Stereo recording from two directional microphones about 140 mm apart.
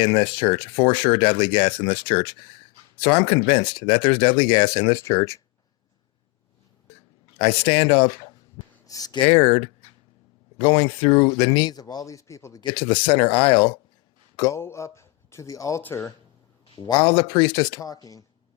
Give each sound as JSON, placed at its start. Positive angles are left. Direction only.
{"t": 0.0, "sound": "speech", "side_deg": 35}
{"t": 7.3, "sound": "speech", "side_deg": 45}
{"t": 9.2, "sound": "speech", "side_deg": 45}
{"t": 12.6, "sound": "speech", "side_deg": 35}
{"t": 14.3, "sound": "speech", "side_deg": 20}
{"t": 16.7, "sound": "speech", "side_deg": 35}